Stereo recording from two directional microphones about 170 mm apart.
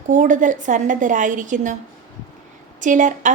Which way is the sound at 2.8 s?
50° right (ahead or behind).